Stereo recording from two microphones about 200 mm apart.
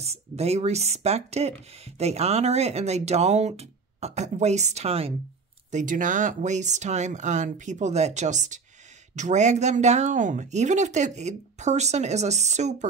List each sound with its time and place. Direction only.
0.0 s speech: 30° right (ahead or behind)